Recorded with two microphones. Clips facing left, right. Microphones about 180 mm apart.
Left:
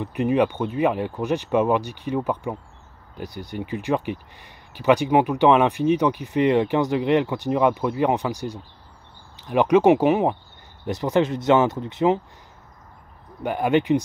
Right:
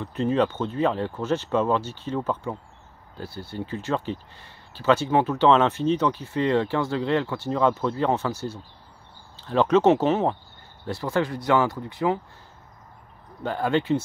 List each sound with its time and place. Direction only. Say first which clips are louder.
0.0 s speech: left 2 dB; 15° left (ahead or behind)
13.4 s speech: left 3 dB; 15° left (ahead or behind)